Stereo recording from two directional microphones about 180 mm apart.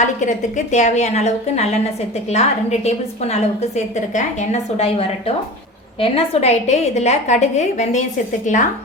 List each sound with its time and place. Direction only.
0.0 s a woman's voice: 40° left (ahead or behind)